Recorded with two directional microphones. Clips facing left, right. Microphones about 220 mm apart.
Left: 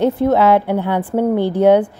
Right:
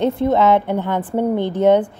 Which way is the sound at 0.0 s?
5° left (ahead or behind).